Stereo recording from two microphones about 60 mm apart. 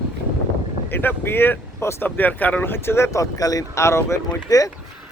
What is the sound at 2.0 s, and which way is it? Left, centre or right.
Speech, left.